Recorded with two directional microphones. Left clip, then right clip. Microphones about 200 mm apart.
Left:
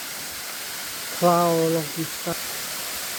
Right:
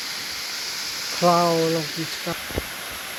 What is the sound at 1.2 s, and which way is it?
Speech, 5° left (ahead or behind).